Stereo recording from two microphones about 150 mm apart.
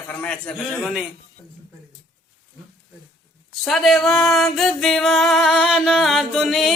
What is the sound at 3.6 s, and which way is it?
Music, 5° left (ahead or behind).